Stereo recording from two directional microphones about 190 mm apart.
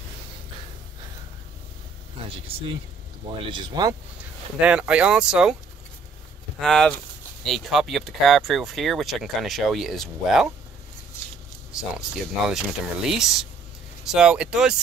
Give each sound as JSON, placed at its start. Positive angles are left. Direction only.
{"t": 3.3, "sound": "speech", "side_deg": -25}
{"t": 4.6, "sound": "speech", "side_deg": -5}
{"t": 6.6, "sound": "speech", "side_deg": 5}
{"t": 11.7, "sound": "speech", "side_deg": -5}